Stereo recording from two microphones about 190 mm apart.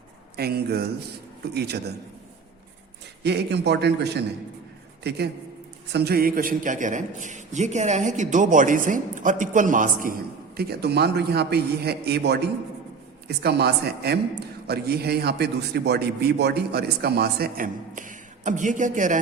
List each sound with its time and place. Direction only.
0.3 s a man's voice: 55° right (ahead or behind)
3.2 s a man's voice: 65° right (ahead or behind); by 10.2 s 45° right (ahead or behind)
10.6 s a man's voice: 60° right (ahead or behind); by 19.2 s 40° right (ahead or behind)